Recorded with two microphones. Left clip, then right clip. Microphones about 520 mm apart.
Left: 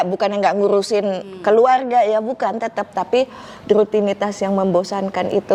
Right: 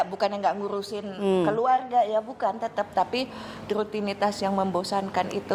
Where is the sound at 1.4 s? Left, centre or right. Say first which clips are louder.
Left 14 dB; left.